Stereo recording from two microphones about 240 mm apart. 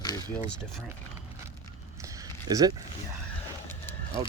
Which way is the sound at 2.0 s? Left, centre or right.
Centre.